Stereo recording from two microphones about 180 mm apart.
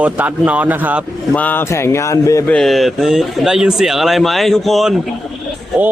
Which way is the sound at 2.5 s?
Centre (ahead or behind).